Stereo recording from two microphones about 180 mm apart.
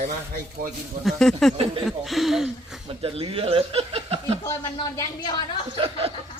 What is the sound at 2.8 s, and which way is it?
Speech, 30° right (ahead or behind).